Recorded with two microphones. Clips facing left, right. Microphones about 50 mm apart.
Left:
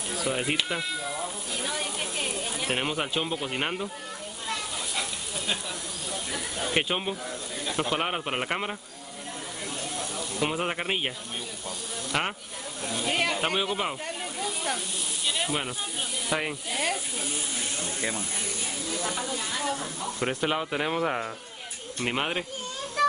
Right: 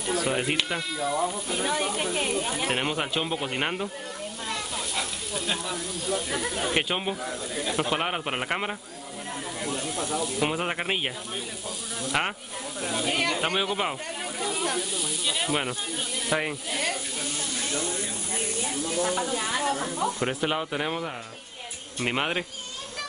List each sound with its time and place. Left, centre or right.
0.1 s speech: centre
1.5 s speech: centre
4.9 s speech: centre
6.3 s speech: centre
6.7 s speech: centre
9.9 s speech: centre
14.4 s snake: centre
15.2 s sizzle: centre
16.3 s speech: centre
19.3 s speech: right
20.2 s speech: centre
22.0 s speech: centre